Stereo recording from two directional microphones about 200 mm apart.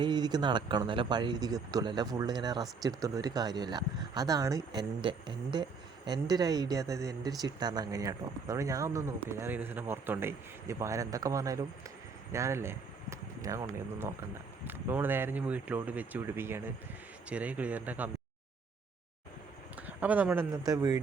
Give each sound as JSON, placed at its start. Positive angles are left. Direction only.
{"t": 0.0, "sound": "speech", "side_deg": -20}
{"t": 19.7, "sound": "speech", "side_deg": -10}